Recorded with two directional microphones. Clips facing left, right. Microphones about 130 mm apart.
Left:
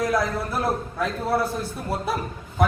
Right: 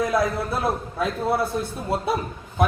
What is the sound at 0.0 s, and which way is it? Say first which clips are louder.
A man's voice: right 1 dB; 20° right (ahead or behind).